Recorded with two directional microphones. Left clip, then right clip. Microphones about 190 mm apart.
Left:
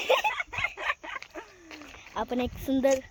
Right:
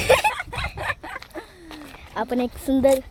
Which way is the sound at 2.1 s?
Centre (ahead or behind).